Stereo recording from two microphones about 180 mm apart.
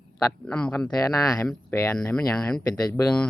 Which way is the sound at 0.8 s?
15° left (ahead or behind).